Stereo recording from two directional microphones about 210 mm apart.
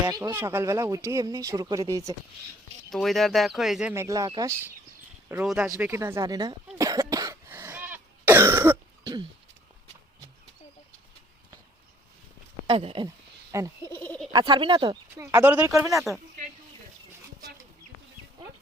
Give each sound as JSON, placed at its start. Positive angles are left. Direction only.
{"t": 0.0, "sound": "speech", "side_deg": -15}
{"t": 2.9, "sound": "speech", "side_deg": 0}
{"t": 6.7, "sound": "cough", "side_deg": -15}
{"t": 12.6, "sound": "speech", "side_deg": -25}
{"t": 13.9, "sound": "a sound", "side_deg": 10}
{"t": 14.3, "sound": "speech", "side_deg": -20}